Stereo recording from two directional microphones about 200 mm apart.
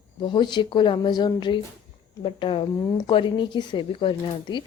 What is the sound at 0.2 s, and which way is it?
A woman's voice, 20° left (ahead or behind).